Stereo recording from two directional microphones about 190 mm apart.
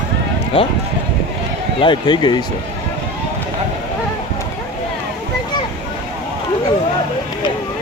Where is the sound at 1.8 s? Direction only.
25° left (ahead or behind).